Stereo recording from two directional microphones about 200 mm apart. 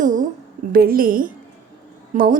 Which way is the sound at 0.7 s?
45° right (ahead or behind).